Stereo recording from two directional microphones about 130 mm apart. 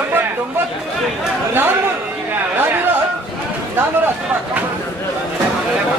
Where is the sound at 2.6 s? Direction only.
15° right (ahead or behind).